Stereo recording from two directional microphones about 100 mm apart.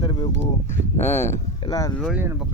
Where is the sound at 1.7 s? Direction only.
35° left (ahead or behind).